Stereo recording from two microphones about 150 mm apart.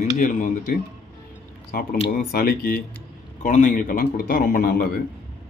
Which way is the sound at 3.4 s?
60° left (ahead or behind).